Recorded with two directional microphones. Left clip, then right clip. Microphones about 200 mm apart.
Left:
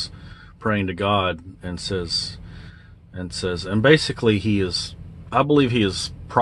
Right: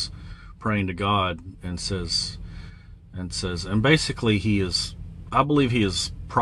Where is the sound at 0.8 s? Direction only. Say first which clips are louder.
Left 2 dB; 25° right (ahead or behind).